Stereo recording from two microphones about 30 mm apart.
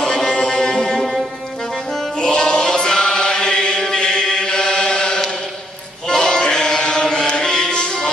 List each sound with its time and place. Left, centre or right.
0.0 s music: centre
2.1 s chant: left